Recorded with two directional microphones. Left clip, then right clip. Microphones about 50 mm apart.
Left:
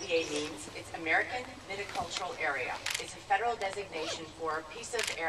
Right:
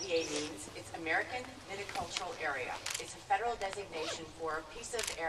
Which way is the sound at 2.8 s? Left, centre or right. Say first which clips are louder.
Left 5 dB; left.